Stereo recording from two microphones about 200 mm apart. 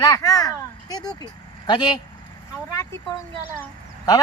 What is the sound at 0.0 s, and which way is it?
A child's voice, 20° left (ahead or behind).